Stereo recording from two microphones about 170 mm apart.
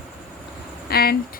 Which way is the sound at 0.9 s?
65° left (ahead or behind).